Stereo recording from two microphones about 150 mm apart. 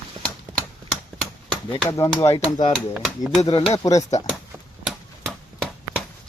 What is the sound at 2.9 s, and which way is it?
Speech, centre (ahead or behind).